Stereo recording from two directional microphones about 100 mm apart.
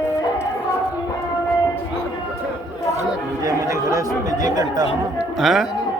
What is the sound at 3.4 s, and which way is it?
Chatter, 35° right (ahead or behind).